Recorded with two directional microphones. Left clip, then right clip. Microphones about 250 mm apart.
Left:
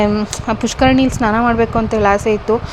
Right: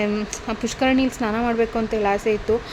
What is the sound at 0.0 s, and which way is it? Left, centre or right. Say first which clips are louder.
Speech: left 8 dB; centre.